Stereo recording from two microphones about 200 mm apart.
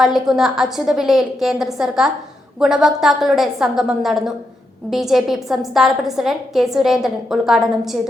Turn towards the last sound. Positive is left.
turn(degrees=0)  # may be behind; listen again after turning